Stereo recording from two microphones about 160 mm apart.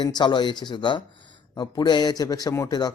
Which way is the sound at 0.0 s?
25° left (ahead or behind).